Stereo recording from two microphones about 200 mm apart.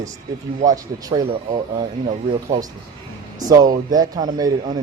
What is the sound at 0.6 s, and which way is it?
Speech, 20° right (ahead or behind).